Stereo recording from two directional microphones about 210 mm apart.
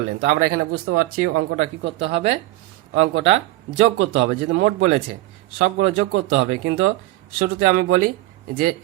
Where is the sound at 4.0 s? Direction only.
70° right (ahead or behind).